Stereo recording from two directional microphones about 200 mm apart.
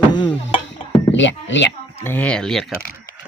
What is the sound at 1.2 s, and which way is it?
Speech, 65° left (ahead or behind).